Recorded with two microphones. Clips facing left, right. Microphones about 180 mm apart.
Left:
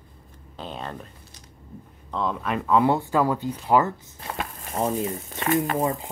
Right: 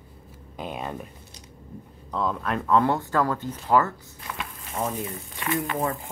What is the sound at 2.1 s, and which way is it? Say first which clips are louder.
Speech: even; centre (ahead or behind).